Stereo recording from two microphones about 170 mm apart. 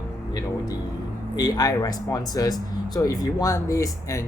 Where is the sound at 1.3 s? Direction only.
20° left (ahead or behind).